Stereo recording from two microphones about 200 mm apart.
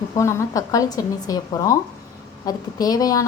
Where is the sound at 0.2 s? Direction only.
15° left (ahead or behind).